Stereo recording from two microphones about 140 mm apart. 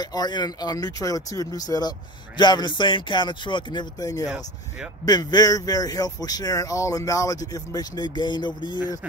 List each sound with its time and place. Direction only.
0.0 s speech: 30° left (ahead or behind)